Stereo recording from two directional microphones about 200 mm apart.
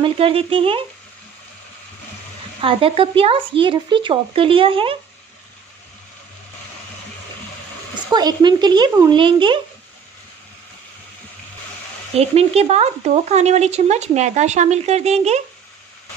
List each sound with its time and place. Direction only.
0.0 s speech: 30° right (ahead or behind)
2.6 s speech: 25° right (ahead or behind)
8.1 s speech: 20° right (ahead or behind)
12.2 s speech: 30° right (ahead or behind)